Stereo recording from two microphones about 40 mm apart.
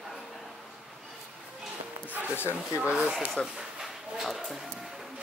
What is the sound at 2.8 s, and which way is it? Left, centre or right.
Speech, right.